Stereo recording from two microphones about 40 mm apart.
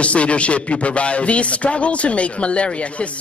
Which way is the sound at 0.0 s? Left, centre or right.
Left.